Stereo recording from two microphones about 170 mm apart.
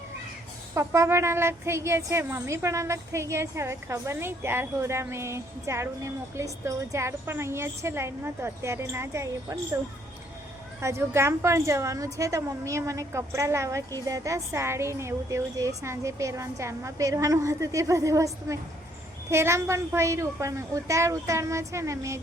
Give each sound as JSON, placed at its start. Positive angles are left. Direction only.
{"t": 0.7, "sound": "speech", "side_deg": -15}
{"t": 10.8, "sound": "speech", "side_deg": -15}